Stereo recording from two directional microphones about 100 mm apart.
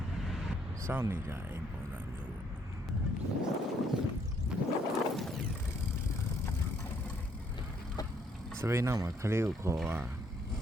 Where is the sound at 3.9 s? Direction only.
5° right (ahead or behind).